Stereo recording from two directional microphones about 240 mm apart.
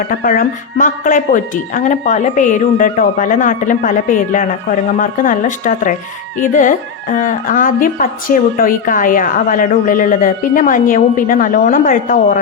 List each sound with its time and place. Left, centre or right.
0.0 s speech: left